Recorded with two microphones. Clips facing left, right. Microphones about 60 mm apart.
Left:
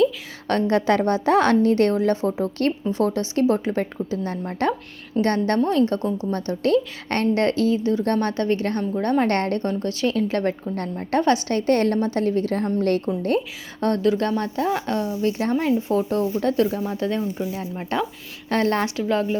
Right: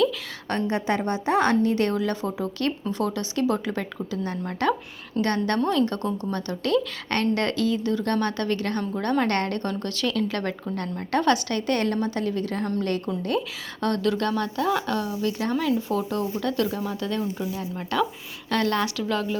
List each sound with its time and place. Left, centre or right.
0.4 s a woman's voice: left
6.0 s speech: centre
6.3 s a woman's voice: left
17.9 s a woman's voice: left